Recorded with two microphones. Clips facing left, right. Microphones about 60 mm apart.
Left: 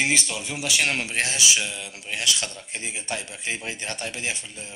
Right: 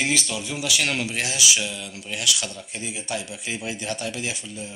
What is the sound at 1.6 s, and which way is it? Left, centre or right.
Speech, left.